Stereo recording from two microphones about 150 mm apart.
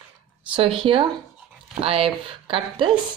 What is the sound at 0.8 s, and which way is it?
Speech, 35° right (ahead or behind).